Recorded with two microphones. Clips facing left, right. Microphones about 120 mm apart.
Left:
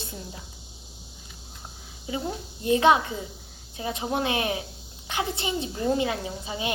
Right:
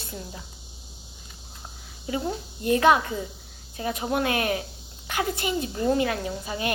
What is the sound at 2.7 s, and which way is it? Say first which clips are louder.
Speech: even; 25° left (ahead or behind).